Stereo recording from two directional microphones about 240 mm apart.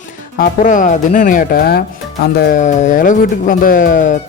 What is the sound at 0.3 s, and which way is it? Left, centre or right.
Speech, left.